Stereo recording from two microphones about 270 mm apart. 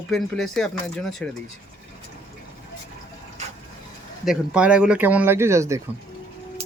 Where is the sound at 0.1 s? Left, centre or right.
Centre.